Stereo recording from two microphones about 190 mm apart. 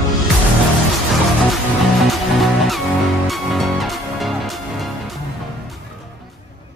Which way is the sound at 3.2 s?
Centre (ahead or behind).